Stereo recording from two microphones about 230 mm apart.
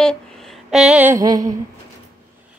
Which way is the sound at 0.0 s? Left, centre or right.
Centre.